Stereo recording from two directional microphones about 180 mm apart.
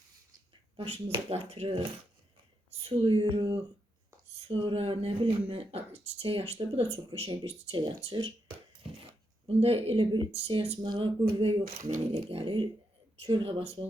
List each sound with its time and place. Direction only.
0.8 s speech: 35° right (ahead or behind)
11.6 s speech: 55° right (ahead or behind)
12.1 s speech: 30° right (ahead or behind)